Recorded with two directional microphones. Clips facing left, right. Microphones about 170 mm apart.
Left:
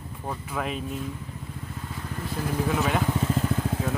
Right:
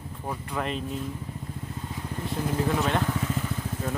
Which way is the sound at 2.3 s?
5° right (ahead or behind).